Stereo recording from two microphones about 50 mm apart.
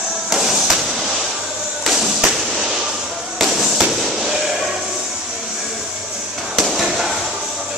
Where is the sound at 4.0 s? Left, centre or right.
Centre.